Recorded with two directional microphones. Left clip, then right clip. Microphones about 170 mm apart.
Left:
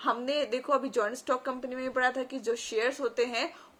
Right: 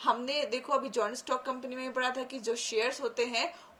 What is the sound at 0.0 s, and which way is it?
A woman's voice, 10° left (ahead or behind).